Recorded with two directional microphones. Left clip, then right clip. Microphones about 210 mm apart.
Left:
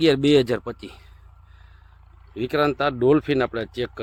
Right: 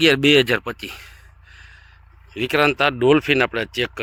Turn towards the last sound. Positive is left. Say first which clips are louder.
# right 5 dB
turn(degrees=0)  # may be behind; listen again after turning